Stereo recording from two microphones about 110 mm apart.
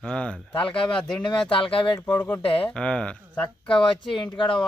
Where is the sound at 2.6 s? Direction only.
10° left (ahead or behind).